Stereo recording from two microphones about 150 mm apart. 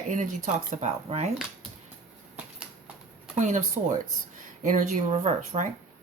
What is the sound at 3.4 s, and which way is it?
Speech, 55° right (ahead or behind).